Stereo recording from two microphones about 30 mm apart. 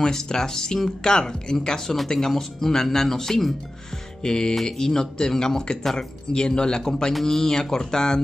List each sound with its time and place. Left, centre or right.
0.0 s speech: centre